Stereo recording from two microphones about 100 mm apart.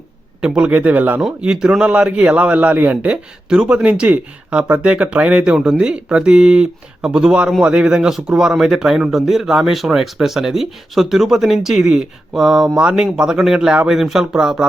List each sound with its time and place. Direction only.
0.4 s a man's voice: 10° right (ahead or behind)